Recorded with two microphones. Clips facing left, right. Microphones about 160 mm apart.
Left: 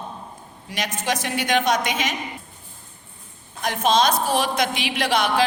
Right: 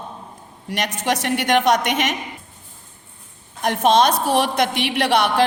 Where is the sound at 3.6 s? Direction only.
65° right (ahead or behind).